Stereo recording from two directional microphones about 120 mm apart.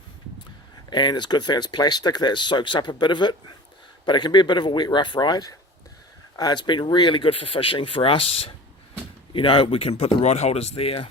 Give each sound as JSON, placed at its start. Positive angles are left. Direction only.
{"t": 0.9, "sound": "speech", "side_deg": 40}